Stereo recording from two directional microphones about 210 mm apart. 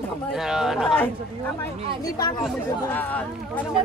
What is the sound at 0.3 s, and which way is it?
Speech, centre (ahead or behind).